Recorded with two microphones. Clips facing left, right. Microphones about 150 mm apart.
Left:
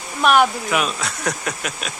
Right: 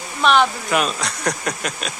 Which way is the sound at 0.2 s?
10° left (ahead or behind).